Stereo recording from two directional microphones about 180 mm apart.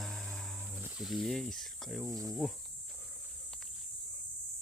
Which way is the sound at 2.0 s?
15° right (ahead or behind).